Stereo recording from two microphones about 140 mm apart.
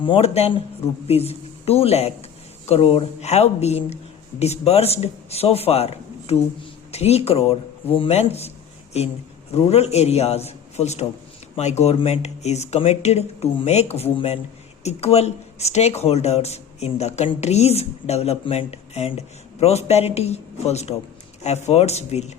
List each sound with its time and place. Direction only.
0.0 s a woman's voice: 40° left (ahead or behind)